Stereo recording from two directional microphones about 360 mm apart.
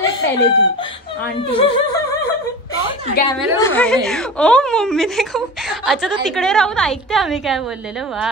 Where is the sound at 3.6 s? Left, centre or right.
Centre.